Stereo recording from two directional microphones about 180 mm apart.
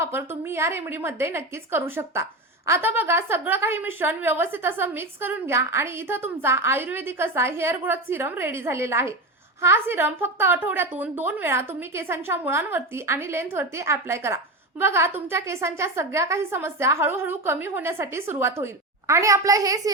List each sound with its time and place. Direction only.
0.0 s a woman's voice: 15° right (ahead or behind)